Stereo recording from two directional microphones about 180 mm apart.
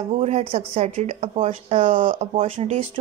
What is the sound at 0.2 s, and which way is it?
Speech, 35° right (ahead or behind).